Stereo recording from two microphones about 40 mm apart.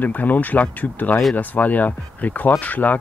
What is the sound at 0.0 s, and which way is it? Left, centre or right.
Speech, left.